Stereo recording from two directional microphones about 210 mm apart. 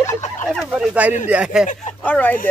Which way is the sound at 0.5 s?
Centre (ahead or behind).